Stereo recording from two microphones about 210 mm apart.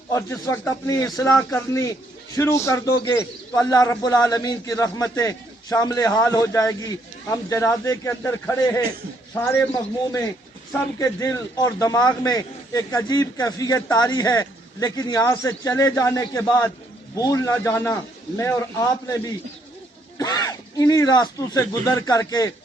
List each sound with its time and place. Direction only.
0.1 s a man's voice: 15° left (ahead or behind)
11.0 s a man's voice: 15° left (ahead or behind)